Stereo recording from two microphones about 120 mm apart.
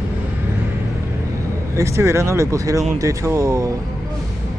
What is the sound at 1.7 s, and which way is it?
Speech, 25° right (ahead or behind).